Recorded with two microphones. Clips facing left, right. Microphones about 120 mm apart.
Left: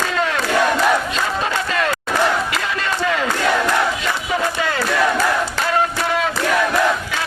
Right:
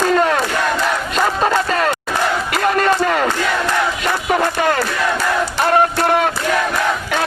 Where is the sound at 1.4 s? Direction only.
40° right (ahead or behind).